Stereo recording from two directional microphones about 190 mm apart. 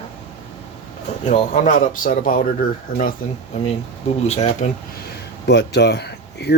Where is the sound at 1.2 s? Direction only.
40° left (ahead or behind).